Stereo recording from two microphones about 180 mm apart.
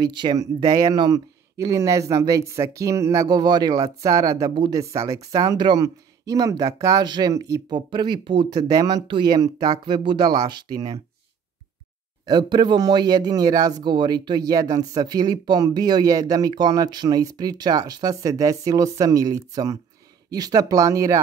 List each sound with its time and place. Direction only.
0.0 s speech: 25° right (ahead or behind)
12.3 s speech: 25° right (ahead or behind)